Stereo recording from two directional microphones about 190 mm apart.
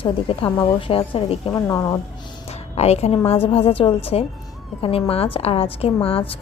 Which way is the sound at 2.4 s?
35° left (ahead or behind).